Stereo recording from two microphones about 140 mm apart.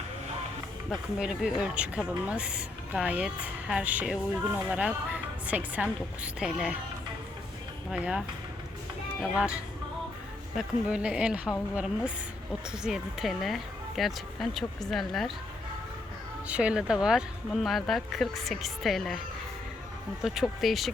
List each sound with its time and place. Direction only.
0.9 s speech: 5° right (ahead or behind)
7.9 s speech: 5° right (ahead or behind)
9.3 s speech: 5° right (ahead or behind)
10.6 s speech: 5° right (ahead or behind)
16.5 s speech: 10° right (ahead or behind)
20.2 s speech: 5° right (ahead or behind)